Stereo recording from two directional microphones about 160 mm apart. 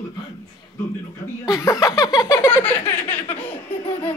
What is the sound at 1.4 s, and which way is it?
Speech, 20° left (ahead or behind).